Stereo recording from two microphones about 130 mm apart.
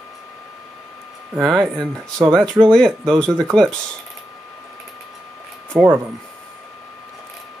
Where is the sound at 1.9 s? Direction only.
25° right (ahead or behind).